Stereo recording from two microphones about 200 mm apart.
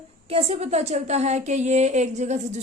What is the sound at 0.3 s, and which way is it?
A woman's voice, 30° right (ahead or behind).